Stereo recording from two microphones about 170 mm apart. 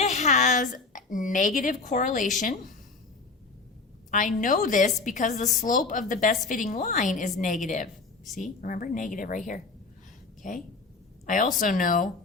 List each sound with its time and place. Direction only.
0.0 s a woman's voice: 45° left (ahead or behind)
4.1 s a woman's voice: 50° left (ahead or behind)
10.4 s a woman's voice: 50° left (ahead or behind)